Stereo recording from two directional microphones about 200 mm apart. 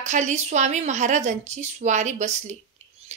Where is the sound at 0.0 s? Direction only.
35° right (ahead or behind).